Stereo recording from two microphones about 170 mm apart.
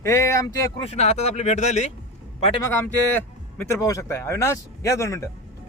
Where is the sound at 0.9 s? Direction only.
40° left (ahead or behind).